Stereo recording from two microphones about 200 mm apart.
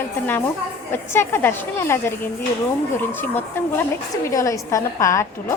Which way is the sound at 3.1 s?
10° left (ahead or behind).